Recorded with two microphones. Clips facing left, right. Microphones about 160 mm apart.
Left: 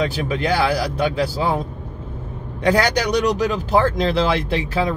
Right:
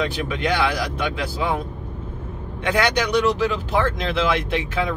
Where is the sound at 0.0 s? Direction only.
35° left (ahead or behind).